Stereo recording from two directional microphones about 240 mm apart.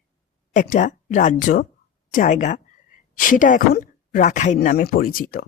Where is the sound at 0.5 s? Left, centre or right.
Left.